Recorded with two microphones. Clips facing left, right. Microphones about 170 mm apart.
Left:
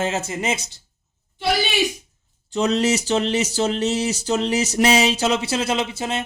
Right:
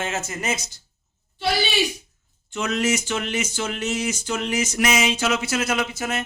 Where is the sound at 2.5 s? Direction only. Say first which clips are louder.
Left 4 dB; 35° left (ahead or behind).